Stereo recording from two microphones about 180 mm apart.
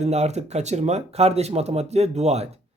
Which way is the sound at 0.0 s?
40° right (ahead or behind).